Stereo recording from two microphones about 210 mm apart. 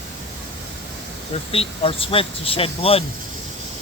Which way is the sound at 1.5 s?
25° left (ahead or behind).